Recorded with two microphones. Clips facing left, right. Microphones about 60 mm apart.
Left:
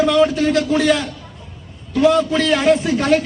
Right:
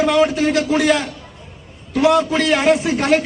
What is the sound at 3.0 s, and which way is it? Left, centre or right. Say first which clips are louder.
Speech: even; right.